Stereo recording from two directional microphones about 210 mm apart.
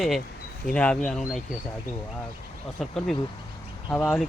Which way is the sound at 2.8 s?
Centre (ahead or behind).